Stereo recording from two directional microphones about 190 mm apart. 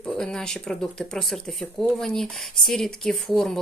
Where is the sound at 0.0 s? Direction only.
5° left (ahead or behind).